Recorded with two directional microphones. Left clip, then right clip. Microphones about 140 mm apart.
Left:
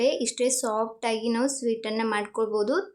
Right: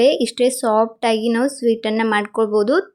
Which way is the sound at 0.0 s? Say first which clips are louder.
Right 9 dB; 35° right (ahead or behind).